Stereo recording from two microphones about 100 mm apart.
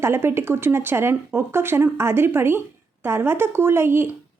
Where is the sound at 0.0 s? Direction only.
25° right (ahead or behind).